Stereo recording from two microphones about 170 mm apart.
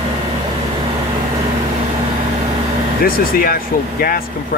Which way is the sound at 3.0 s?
60° left (ahead or behind).